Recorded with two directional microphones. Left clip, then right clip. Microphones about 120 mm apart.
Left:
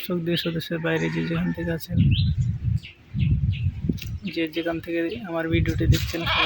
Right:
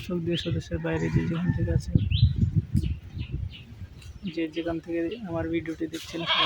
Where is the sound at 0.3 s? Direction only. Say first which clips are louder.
Left 5 dB; 5° left (ahead or behind).